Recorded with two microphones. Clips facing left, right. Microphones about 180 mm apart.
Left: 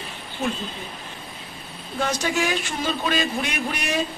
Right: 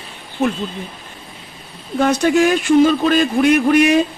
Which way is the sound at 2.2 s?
50° right (ahead or behind).